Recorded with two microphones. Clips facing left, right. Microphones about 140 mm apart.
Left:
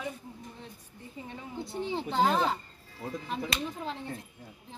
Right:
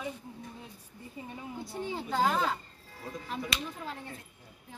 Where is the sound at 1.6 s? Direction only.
25° left (ahead or behind).